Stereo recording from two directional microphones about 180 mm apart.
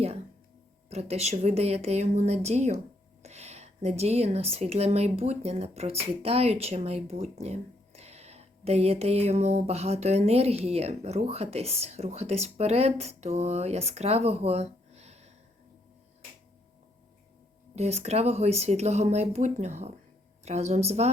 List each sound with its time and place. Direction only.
0.9 s speech: 35° right (ahead or behind)
17.7 s speech: 35° right (ahead or behind)